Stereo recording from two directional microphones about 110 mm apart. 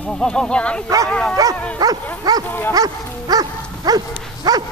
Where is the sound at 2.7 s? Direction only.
35° right (ahead or behind).